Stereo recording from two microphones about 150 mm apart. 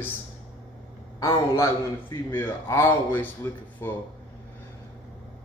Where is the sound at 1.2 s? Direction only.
20° left (ahead or behind).